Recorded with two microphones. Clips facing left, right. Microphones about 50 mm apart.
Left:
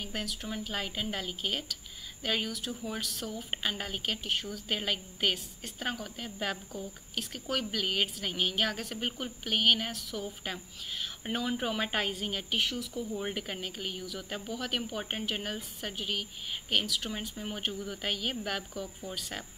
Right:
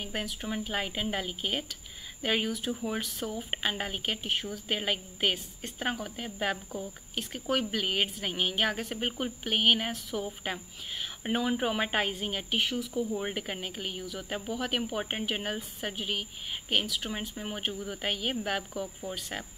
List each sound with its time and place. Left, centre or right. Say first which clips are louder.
0.0 s speech: right 2 dB; centre